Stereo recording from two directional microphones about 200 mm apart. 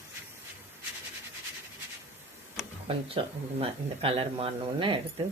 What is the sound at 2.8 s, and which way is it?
Speech, 30° right (ahead or behind).